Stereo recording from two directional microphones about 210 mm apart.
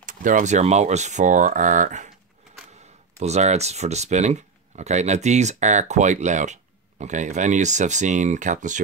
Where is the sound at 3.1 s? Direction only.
30° right (ahead or behind).